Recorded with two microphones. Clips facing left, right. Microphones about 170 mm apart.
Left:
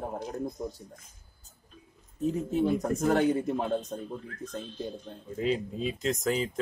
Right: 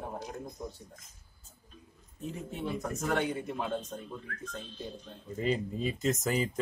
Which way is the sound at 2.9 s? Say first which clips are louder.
Left 7 dB; 45° left (ahead or behind).